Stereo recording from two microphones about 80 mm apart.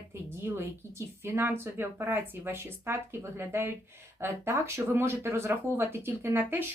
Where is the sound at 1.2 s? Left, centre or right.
Right.